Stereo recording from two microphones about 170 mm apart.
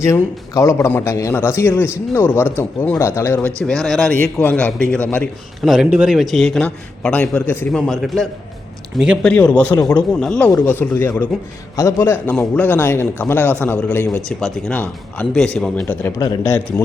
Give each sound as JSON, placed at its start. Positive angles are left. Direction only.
{"t": 0.0, "sound": "a man's voice", "side_deg": 15}
{"t": 5.6, "sound": "a man's voice", "side_deg": -5}
{"t": 9.3, "sound": "a man's voice", "side_deg": 10}